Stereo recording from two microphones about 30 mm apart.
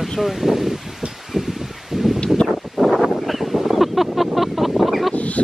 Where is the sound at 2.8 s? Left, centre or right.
Centre.